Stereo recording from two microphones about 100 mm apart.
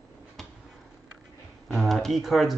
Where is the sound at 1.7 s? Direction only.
Centre (ahead or behind).